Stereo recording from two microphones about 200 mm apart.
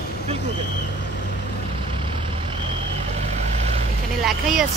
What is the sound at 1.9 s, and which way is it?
Vehicle, 25° right (ahead or behind).